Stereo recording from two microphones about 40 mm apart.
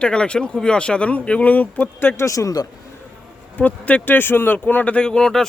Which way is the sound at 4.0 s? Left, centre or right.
Left.